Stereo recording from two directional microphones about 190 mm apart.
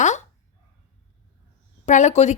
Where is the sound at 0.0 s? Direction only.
40° left (ahead or behind).